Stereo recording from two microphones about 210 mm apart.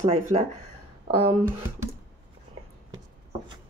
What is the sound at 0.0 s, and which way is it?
Speech, 30° right (ahead or behind).